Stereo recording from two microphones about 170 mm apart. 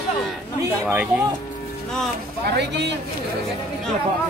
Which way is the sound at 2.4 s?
85° right.